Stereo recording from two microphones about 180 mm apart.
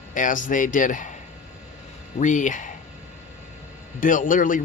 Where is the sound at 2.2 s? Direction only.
45° left (ahead or behind).